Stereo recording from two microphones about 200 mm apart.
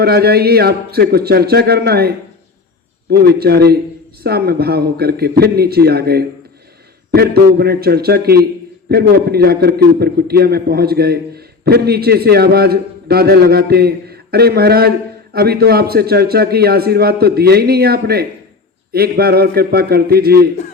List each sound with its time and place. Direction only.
0.0 s a man's voice: 50° right (ahead or behind)